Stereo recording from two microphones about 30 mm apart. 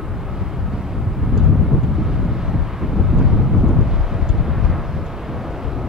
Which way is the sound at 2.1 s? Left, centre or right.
Centre.